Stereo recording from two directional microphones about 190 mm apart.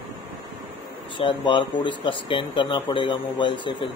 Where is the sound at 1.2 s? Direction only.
25° left (ahead or behind).